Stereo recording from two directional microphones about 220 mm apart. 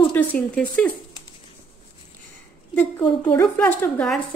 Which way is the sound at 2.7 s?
5° left (ahead or behind).